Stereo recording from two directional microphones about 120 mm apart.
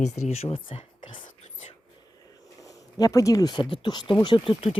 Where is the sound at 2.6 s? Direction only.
30° left (ahead or behind).